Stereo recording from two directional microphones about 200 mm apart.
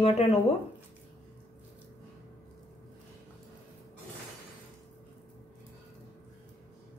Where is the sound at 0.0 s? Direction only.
30° left (ahead or behind).